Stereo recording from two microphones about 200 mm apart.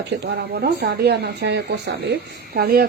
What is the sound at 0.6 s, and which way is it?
A woman's voice, 55° right (ahead or behind).